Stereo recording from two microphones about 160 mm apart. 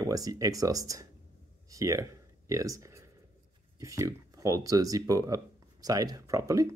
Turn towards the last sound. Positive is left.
turn(degrees=-20)  # may be behind; listen again after turning